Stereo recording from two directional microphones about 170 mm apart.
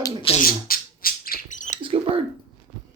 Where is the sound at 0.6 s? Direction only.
60° left (ahead or behind).